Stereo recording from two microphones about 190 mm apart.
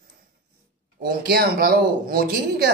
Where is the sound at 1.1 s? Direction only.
55° right (ahead or behind).